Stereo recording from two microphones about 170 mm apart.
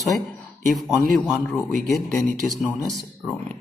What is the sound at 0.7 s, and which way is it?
Speech, centre (ahead or behind).